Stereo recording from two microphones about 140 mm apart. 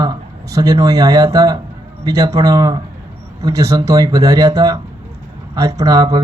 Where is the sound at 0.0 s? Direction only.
25° right (ahead or behind).